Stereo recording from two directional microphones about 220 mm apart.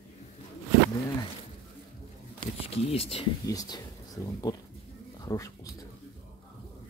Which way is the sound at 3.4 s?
15° left (ahead or behind).